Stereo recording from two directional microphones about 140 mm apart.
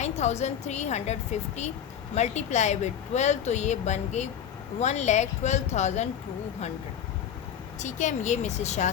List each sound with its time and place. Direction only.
0.0 s a woman's voice: 55° left (ahead or behind)
7.8 s a woman's voice: 60° left (ahead or behind)